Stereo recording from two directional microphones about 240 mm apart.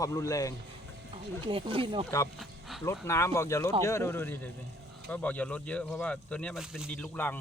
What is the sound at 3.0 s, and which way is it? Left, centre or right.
Speech, centre.